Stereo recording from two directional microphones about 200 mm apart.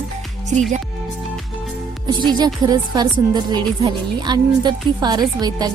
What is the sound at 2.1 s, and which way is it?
A woman's voice, 20° right (ahead or behind).